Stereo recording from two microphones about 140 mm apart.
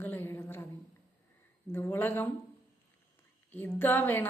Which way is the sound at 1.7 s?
15° left (ahead or behind).